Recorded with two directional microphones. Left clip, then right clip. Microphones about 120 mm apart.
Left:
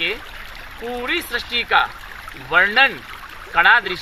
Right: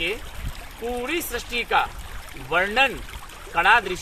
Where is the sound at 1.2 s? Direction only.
25° right (ahead or behind).